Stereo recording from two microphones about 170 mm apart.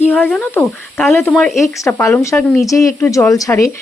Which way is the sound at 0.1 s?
10° left (ahead or behind).